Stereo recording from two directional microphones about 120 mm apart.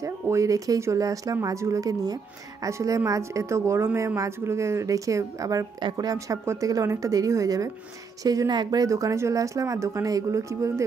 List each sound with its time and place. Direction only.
0.0 s speech: 25° right (ahead or behind)